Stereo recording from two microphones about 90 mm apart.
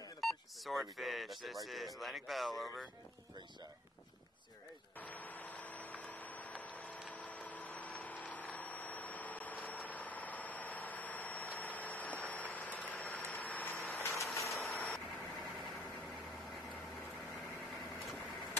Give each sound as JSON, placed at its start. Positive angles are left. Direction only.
{"t": 0.2, "sound": "speech", "side_deg": 0}
{"t": 5.0, "sound": "a sound", "side_deg": 20}
{"t": 7.1, "sound": "vehicle", "side_deg": 15}
{"t": 14.1, "sound": "vehicle", "side_deg": 35}